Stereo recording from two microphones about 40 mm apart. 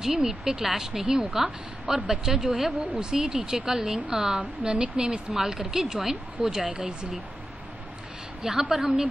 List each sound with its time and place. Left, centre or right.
0.0 s speech: centre
8.4 s speech: centre